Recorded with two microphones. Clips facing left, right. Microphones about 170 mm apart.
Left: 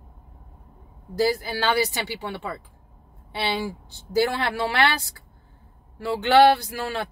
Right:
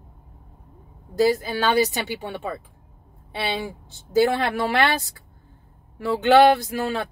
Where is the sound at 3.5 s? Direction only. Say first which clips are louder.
Left 1 dB; 20° right (ahead or behind).